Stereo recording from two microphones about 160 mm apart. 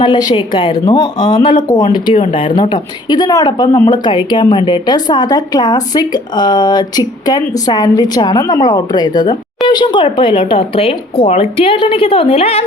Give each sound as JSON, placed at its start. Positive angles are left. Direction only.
{"t": 0.0, "sound": "speech", "side_deg": 25}